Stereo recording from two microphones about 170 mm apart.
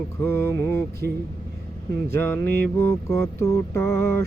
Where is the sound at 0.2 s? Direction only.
15° left (ahead or behind).